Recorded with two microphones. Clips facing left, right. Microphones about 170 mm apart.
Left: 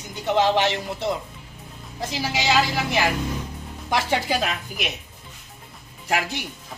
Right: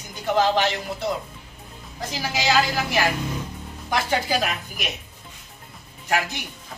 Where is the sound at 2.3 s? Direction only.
25° left (ahead or behind).